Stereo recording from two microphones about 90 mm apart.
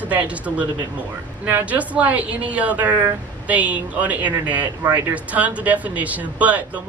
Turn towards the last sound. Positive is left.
turn(degrees=-15)  # may be behind; listen again after turning